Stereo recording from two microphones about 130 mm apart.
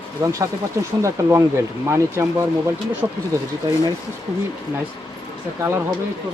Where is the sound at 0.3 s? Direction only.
25° right (ahead or behind).